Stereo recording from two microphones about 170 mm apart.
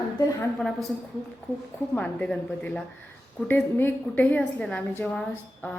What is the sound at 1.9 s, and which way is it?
A woman's voice, 5° left (ahead or behind).